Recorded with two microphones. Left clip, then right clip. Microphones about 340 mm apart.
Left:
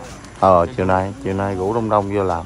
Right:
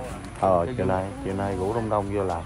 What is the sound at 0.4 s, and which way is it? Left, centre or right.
Speech, left.